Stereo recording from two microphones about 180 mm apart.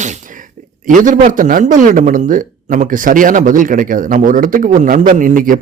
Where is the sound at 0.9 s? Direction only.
45° right (ahead or behind).